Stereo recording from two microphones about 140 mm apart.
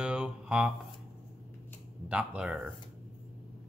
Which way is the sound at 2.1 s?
10° right (ahead or behind).